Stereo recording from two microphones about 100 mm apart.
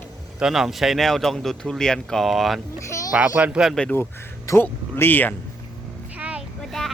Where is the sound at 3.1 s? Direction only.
15° right (ahead or behind).